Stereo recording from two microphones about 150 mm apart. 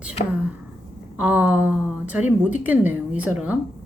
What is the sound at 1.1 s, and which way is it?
A woman's voice, 10° right (ahead or behind).